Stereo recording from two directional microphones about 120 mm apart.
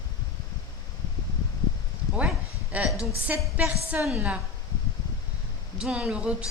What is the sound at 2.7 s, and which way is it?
A woman's voice, 10° right (ahead or behind).